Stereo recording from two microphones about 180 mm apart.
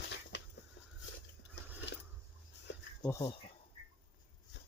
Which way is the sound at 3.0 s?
15° left (ahead or behind).